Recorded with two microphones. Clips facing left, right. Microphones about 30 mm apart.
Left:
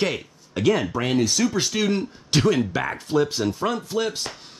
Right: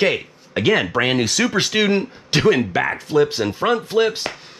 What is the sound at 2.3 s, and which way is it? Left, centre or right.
Speech, right.